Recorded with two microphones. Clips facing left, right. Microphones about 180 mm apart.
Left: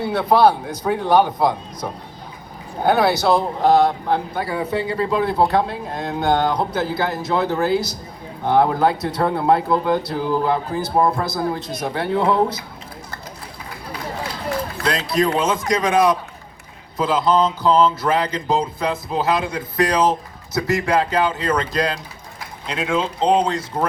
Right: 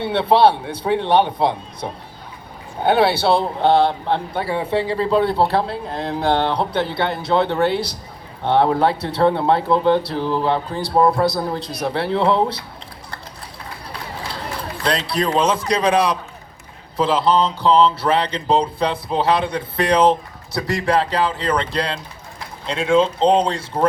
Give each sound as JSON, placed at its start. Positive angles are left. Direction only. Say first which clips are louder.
{"t": 0.0, "sound": "a man's voice", "louder": "right 1 dB", "side_deg": -30}
{"t": 14.8, "sound": "speech", "louder": "left 1 dB", "side_deg": -30}
{"t": 17.0, "sound": "a man's voice", "louder": "even", "side_deg": -30}